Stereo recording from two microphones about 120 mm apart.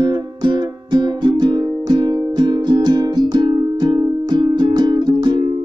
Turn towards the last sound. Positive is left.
turn(degrees=-40)  # may be behind; listen again after turning